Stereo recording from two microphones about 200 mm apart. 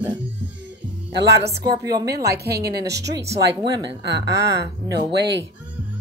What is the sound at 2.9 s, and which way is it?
Speech, 15° right (ahead or behind).